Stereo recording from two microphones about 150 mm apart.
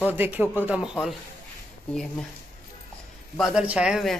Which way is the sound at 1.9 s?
5° left (ahead or behind).